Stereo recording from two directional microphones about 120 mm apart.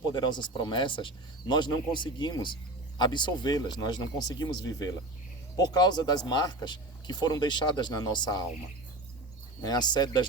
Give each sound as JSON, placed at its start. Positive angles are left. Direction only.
{"t": 0.1, "sound": "speech", "side_deg": 40}
{"t": 9.6, "sound": "speech", "side_deg": 35}